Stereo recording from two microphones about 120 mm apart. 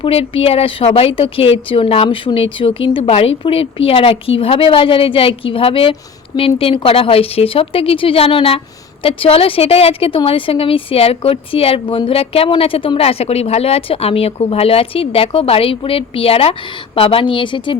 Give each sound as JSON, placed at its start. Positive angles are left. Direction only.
{"t": 0.0, "sound": "a woman's voice", "side_deg": 55}